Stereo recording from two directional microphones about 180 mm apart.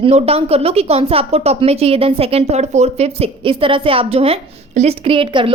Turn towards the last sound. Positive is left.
turn(degrees=-30)  # may be behind; listen again after turning